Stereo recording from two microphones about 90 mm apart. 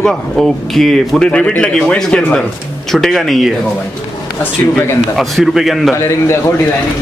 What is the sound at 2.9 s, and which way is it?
Speech, centre (ahead or behind).